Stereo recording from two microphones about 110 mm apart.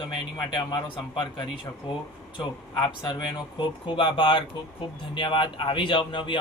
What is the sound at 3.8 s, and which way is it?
Speech, 50° left (ahead or behind).